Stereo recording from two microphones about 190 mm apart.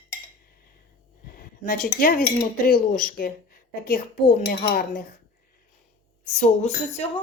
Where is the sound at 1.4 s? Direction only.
45° left (ahead or behind).